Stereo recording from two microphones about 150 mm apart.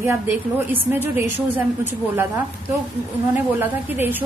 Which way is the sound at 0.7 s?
15° right (ahead or behind).